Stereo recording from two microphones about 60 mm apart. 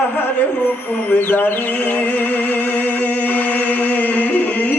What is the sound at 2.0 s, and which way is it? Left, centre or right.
Music, left.